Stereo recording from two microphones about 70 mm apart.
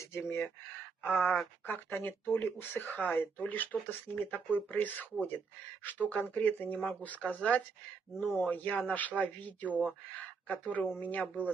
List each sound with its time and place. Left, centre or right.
0.1 s speech: left